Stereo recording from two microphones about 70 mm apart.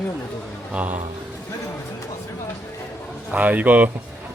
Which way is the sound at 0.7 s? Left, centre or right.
Right.